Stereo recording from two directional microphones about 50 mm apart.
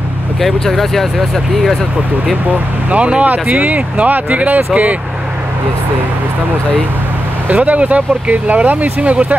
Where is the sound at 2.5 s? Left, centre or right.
Right.